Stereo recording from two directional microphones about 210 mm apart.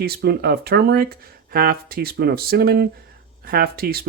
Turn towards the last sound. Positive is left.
turn(degrees=-45)  # may be behind; listen again after turning